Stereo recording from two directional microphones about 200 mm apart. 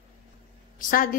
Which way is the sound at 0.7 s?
45° left (ahead or behind).